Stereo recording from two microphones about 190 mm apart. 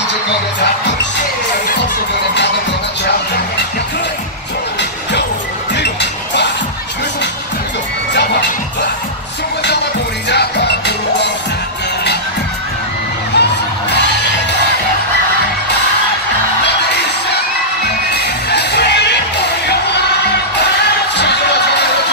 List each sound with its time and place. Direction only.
5.8 s music: 65° left (ahead or behind)
13.4 s music: 65° left (ahead or behind)
18.1 s music: 60° left (ahead or behind)